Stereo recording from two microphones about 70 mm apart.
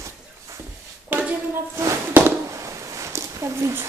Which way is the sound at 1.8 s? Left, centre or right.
Right.